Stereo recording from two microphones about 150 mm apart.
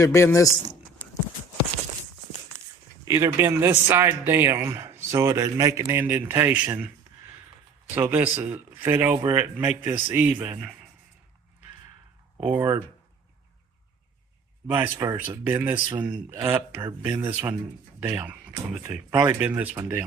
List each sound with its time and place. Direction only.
0.0 s speech: 20° left (ahead or behind)
3.0 s speech: 20° right (ahead or behind)
7.9 s speech: 15° right (ahead or behind)
12.4 s speech: 15° right (ahead or behind)
14.7 s speech: 10° right (ahead or behind)
14.9 s speech: 25° right (ahead or behind)